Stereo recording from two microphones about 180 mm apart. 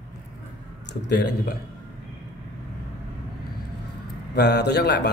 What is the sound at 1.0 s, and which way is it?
Speech, 70° left (ahead or behind).